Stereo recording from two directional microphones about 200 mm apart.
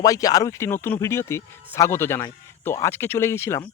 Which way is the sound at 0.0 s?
15° left (ahead or behind).